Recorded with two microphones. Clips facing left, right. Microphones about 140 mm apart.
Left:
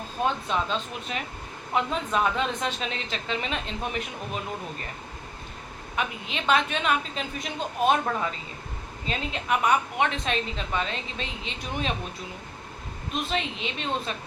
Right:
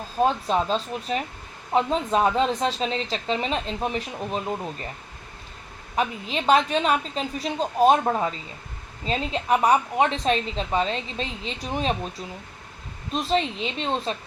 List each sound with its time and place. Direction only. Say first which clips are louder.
0.2 s a woman's voice: right 5 dB; 35° right (ahead or behind)
6.0 s a woman's voice: right 5 dB; 35° right (ahead or behind)
13.1 s a woman's voice: right 6 dB; 35° right (ahead or behind)